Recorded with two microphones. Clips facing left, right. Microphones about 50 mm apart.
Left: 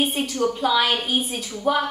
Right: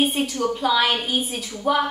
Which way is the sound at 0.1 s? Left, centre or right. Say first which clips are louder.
Even; centre.